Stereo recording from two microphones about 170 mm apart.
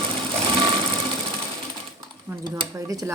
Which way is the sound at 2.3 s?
20° right (ahead or behind).